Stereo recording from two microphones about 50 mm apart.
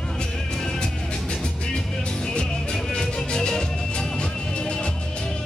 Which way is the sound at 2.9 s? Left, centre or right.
Centre.